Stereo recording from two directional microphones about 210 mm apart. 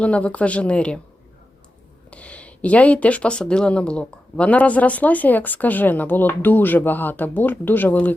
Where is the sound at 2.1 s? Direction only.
5° left (ahead or behind).